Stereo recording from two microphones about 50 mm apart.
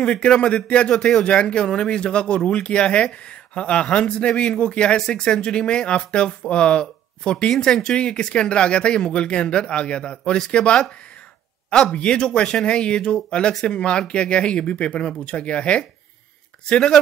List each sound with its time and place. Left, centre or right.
0.0 s speech: left